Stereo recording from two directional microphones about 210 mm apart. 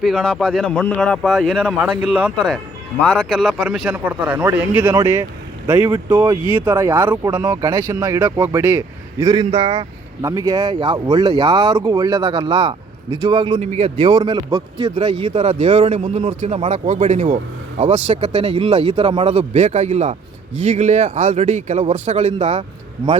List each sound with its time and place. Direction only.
0.0 s speech: centre (ahead or behind); by 13.9 s 30° right (ahead or behind)
14.0 s speech: 20° right (ahead or behind)